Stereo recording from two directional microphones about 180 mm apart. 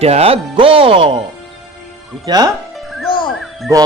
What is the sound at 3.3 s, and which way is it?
Music, centre (ahead or behind).